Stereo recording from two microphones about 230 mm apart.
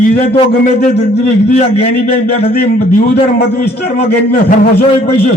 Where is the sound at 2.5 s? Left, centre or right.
Left.